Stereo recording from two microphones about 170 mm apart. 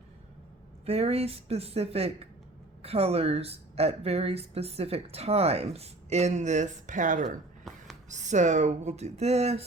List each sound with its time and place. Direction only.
0.9 s a woman's voice: 35° right (ahead or behind)
7.7 s a sound: centre (ahead or behind)
8.1 s speech: 45° right (ahead or behind)